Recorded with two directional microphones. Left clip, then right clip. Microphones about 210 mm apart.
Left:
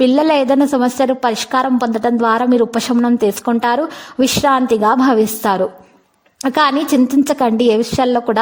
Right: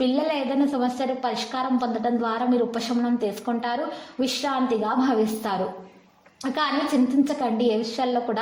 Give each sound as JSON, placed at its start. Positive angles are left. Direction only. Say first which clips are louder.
{"t": 0.0, "sound": "a woman's voice", "louder": "left 11 dB", "side_deg": 45}